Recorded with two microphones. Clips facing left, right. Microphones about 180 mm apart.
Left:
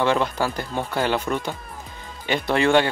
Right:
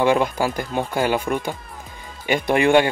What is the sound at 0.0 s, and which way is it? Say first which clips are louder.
Speech: right 3 dB; 10° right (ahead or behind).